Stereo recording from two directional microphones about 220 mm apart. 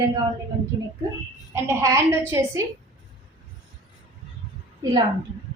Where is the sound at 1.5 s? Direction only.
10° right (ahead or behind).